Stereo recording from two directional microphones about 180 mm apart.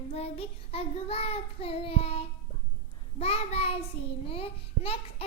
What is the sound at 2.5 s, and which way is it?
Music, 35° left (ahead or behind).